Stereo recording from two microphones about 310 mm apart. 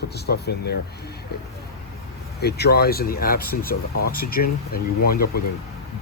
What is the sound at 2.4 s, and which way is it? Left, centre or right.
Speech, left.